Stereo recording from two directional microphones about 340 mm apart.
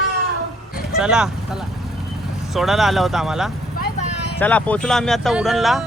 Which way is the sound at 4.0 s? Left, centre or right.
Centre.